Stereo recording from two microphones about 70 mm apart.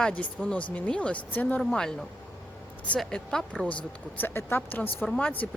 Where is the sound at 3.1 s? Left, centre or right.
Centre.